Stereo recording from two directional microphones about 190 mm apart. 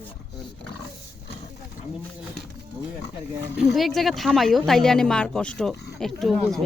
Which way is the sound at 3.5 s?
Centre (ahead or behind).